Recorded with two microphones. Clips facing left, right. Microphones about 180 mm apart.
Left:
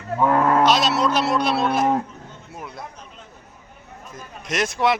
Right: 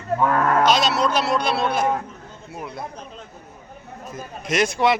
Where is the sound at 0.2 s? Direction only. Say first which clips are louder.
Left 3 dB; 20° left (ahead or behind).